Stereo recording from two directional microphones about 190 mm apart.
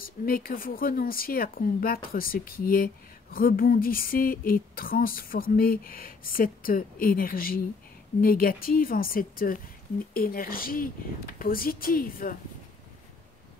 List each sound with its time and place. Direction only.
0.0 s speech: 50° left (ahead or behind)